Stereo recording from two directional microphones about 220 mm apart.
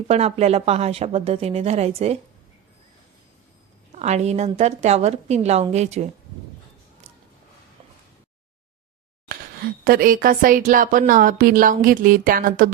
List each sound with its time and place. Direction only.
0.1 s a woman's voice: 30° right (ahead or behind)
3.9 s speech: 30° right (ahead or behind)
9.3 s speech: 40° right (ahead or behind)